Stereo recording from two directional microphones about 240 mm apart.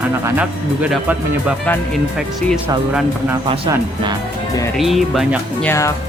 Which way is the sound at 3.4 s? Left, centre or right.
Right.